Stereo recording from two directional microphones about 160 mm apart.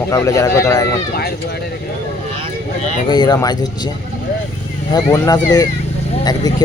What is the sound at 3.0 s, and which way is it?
Speech, 25° left (ahead or behind).